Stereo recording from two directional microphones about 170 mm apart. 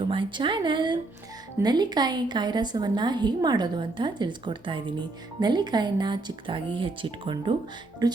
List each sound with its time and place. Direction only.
0.0 s a woman's voice: 30° right (ahead or behind)